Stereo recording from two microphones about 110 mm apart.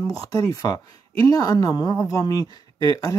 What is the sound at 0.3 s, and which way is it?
Speech, 30° left (ahead or behind).